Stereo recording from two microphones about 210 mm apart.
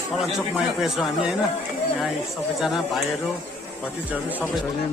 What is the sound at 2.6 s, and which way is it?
Speech, centre (ahead or behind).